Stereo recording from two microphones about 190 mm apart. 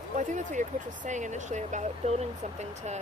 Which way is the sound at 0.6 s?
40° right (ahead or behind).